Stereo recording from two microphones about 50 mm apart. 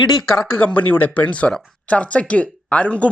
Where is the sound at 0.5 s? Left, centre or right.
Left.